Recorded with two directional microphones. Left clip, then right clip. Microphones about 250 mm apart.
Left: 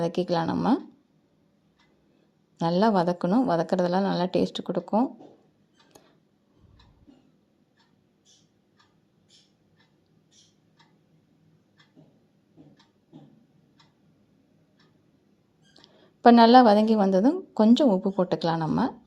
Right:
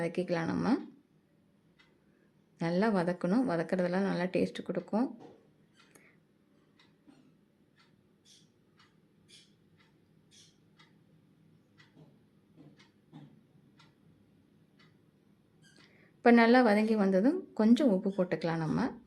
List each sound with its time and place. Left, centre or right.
0.0 s a woman's voice: centre
2.6 s a woman's voice: centre
16.2 s a woman's voice: centre